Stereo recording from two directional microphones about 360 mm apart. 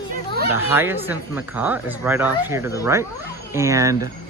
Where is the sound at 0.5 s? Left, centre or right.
Centre.